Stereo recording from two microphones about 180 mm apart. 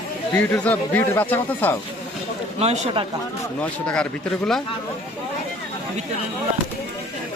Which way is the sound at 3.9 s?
5° left (ahead or behind).